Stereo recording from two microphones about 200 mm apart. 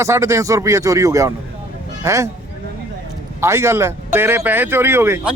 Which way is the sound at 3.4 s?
15° right (ahead or behind).